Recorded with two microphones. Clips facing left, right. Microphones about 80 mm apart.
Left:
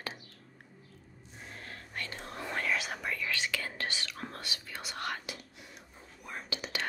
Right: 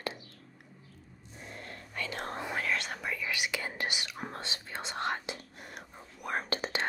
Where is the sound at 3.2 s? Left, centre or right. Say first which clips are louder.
Right 2 dB; centre.